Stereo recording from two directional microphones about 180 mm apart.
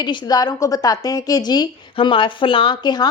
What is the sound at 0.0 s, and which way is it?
Speech, 25° left (ahead or behind).